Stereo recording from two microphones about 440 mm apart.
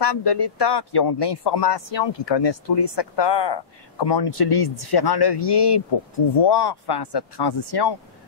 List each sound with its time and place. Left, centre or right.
0.0 s speech: left